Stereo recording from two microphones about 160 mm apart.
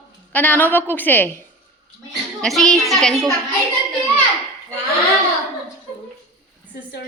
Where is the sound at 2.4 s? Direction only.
5° left (ahead or behind).